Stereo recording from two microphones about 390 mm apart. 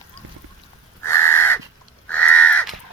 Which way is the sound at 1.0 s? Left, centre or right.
Centre.